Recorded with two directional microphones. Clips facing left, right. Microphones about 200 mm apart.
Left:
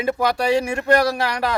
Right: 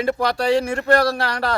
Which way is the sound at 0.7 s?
15° left (ahead or behind).